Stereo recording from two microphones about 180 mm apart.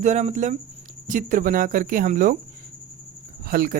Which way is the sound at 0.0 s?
40° right (ahead or behind).